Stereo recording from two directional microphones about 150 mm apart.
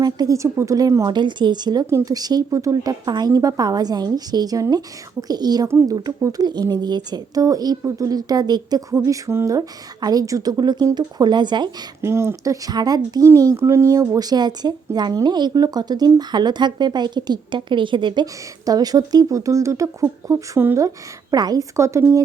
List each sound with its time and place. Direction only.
0.0 s speech: 25° right (ahead or behind)
12.0 s speech: 15° right (ahead or behind)